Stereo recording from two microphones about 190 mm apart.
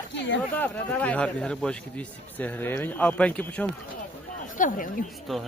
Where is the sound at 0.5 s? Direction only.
10° left (ahead or behind).